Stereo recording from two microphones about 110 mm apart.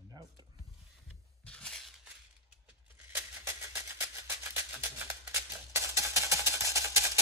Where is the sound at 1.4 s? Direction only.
10° left (ahead or behind).